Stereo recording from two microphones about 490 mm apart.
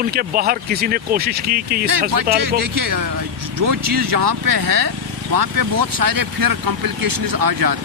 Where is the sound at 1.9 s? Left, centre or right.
Right.